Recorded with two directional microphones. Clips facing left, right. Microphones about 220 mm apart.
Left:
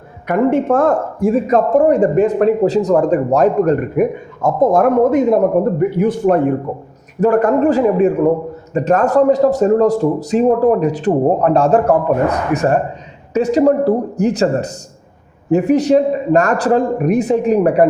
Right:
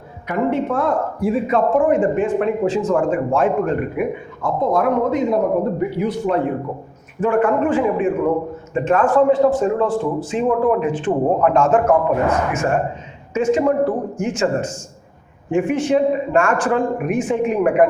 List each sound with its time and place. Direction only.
0.3 s speech: 50° left (ahead or behind)